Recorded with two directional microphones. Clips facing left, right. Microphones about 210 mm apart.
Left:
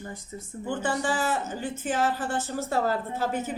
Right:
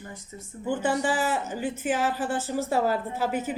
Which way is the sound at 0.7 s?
15° right (ahead or behind).